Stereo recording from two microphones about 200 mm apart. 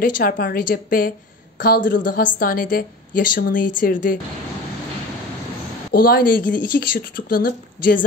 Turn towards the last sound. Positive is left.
turn(degrees=45)  # may be behind; listen again after turning